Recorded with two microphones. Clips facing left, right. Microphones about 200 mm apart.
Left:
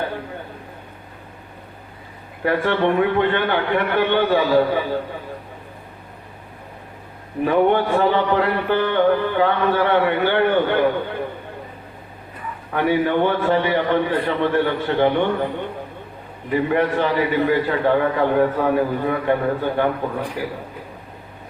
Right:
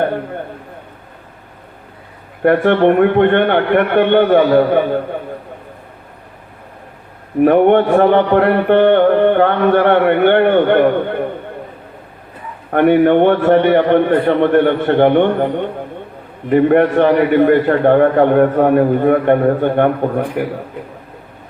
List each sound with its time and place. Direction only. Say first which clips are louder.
0.0 s a man's voice: right 9 dB; 60° right (ahead or behind)
2.4 s a man's voice: right 8 dB; 60° right (ahead or behind)
7.4 s a man's voice: right 7 dB; 60° right (ahead or behind)
12.7 s a man's voice: right 9 dB; 60° right (ahead or behind)